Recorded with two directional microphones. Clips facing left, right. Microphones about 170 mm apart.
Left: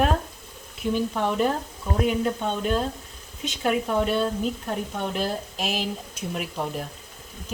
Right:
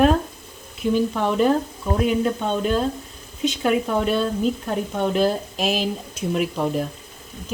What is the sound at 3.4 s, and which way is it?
Speech, 90° right.